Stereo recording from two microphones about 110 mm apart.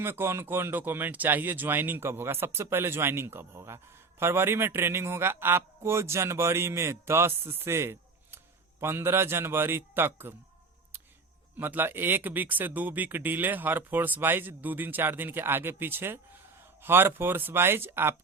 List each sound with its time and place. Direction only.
0.0 s a man's voice: 25° right (ahead or behind)
11.5 s a man's voice: 15° right (ahead or behind)